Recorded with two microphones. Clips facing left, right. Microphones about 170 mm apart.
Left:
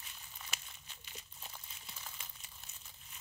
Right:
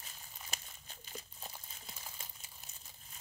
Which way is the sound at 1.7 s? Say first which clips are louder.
Right 1 dB; 40° right (ahead or behind).